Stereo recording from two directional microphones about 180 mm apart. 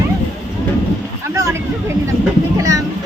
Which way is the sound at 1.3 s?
15° right (ahead or behind).